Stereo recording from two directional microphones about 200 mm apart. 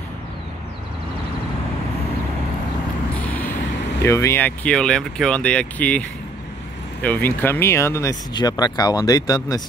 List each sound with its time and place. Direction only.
4.0 s speech: 15° left (ahead or behind)